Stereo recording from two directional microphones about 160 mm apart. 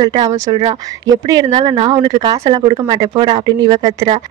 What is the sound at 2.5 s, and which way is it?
Speech, 35° right (ahead or behind).